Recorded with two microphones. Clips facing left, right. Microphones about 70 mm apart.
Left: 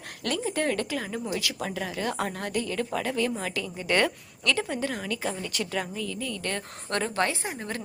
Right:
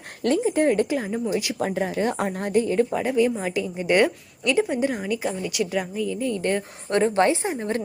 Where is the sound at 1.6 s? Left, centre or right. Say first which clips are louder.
Right 7 dB; right; by 6.1 s centre.